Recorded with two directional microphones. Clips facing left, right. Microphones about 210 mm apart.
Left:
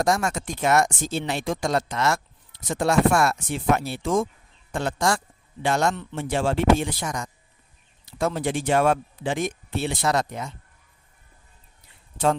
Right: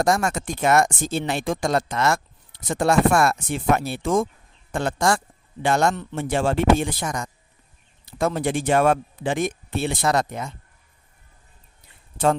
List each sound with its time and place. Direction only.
0.0 s speech: 50° right (ahead or behind)
12.1 s speech: 50° right (ahead or behind)